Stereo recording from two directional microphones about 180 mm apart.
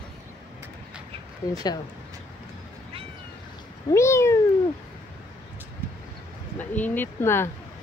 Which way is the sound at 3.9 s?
15° left (ahead or behind).